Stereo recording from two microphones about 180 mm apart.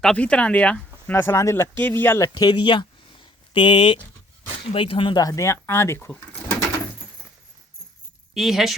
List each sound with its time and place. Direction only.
0.0 s speech: 5° left (ahead or behind)
8.3 s a woman's voice: centre (ahead or behind)